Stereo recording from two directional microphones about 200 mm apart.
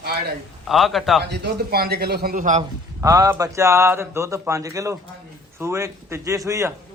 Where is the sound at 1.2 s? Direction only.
50° right (ahead or behind).